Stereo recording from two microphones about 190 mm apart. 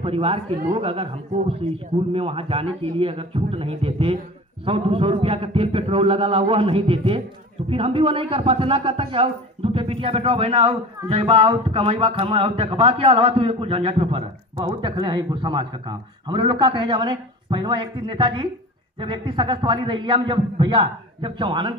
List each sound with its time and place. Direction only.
0.0 s speech: 30° right (ahead or behind)